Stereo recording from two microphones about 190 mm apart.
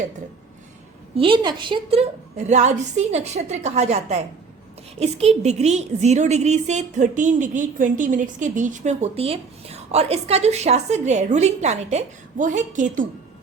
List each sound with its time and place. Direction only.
1.1 s a woman's voice: 25° right (ahead or behind); by 13.1 s 40° right (ahead or behind)